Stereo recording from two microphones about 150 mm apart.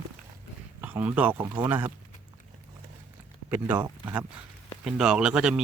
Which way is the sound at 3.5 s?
10° right (ahead or behind).